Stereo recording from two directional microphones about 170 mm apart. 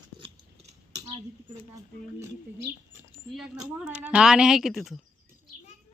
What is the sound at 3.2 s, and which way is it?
A woman's voice, 5° right (ahead or behind).